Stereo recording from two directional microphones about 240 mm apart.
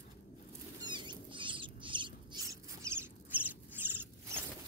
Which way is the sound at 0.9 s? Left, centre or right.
Centre.